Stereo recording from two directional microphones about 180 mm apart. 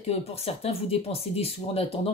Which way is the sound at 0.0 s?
35° left (ahead or behind).